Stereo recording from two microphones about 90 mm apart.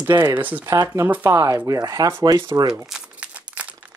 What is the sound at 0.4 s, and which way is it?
Speech, 20° right (ahead or behind).